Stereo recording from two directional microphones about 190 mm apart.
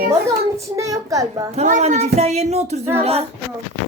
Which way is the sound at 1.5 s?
35° right (ahead or behind).